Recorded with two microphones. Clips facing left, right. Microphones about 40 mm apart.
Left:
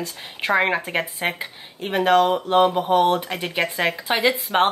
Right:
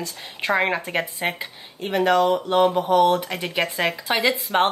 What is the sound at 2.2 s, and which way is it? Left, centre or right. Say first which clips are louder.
Mantra: left 3 dB; left.